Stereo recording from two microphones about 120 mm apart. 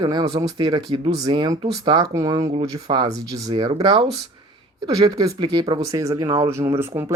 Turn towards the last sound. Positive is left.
turn(degrees=-20)  # may be behind; listen again after turning